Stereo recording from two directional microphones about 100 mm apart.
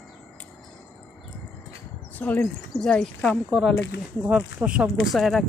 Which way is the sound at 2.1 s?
20° left (ahead or behind).